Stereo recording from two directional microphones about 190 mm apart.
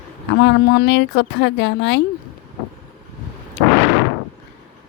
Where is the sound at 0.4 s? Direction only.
60° left (ahead or behind).